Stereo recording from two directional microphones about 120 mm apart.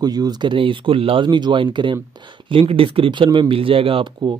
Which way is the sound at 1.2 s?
40° right (ahead or behind).